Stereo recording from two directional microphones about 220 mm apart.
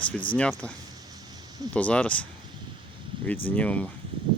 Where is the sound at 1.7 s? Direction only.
5° left (ahead or behind).